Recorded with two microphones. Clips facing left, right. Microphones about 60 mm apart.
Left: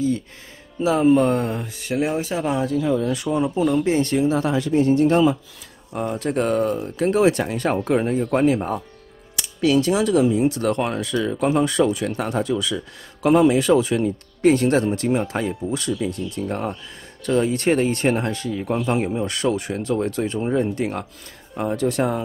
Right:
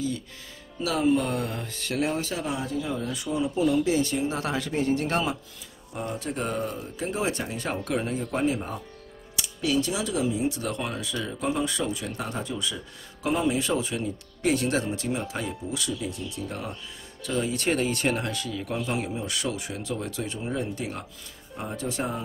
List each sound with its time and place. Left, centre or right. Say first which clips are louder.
0.7 s speech: left 7 dB; left
1.6 s speech: left 5 dB; centre
2.6 s speech: left 9 dB; left
3.4 s speech: left 2 dB; left
3.7 s speech: left 4 dB; left
6.1 s speech: left 10 dB; left
7.8 s speech: left 8 dB; left
8.3 s speech: left 8 dB; left
13.9 s speech: left 9 dB; left
21.5 s speech: left 10 dB; left